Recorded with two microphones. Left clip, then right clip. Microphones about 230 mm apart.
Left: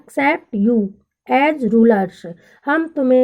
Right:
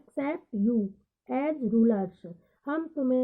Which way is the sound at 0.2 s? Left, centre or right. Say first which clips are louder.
Left 14 dB; left.